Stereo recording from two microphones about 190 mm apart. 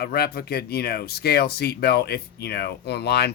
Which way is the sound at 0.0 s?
55° left (ahead or behind).